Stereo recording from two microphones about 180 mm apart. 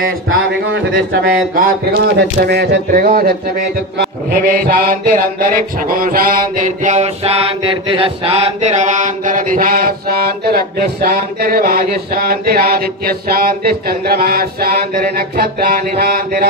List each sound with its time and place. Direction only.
0.9 s speech: 55° right (ahead or behind)
2.9 s mantra: 50° right (ahead or behind)